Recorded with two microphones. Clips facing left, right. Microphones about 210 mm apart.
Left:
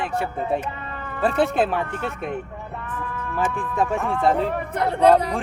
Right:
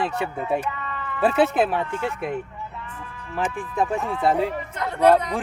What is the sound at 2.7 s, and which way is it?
Speech, 55° left (ahead or behind).